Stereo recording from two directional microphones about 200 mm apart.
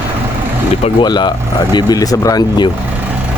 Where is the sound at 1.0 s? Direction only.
20° left (ahead or behind).